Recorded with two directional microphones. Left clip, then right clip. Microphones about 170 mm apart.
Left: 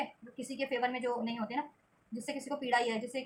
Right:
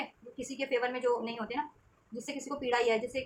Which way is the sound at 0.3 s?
15° right (ahead or behind).